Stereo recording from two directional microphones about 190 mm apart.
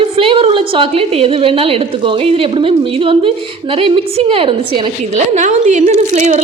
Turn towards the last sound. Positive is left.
turn(degrees=-35)  # may be behind; listen again after turning